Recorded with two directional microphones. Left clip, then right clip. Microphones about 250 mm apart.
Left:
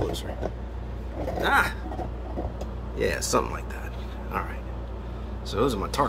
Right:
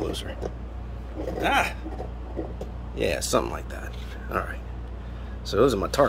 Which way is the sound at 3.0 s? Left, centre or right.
Centre.